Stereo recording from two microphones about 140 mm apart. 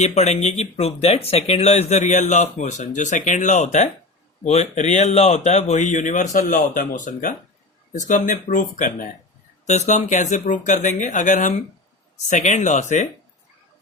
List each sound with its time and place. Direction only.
0.0 s speech: 50° left (ahead or behind); by 9.0 s 70° left (ahead or behind)
9.6 s speech: 55° left (ahead or behind)